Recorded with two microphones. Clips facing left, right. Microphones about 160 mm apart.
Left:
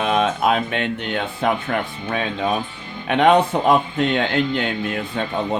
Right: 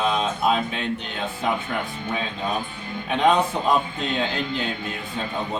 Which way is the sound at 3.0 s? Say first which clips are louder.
Left 5 dB; 70° left (ahead or behind).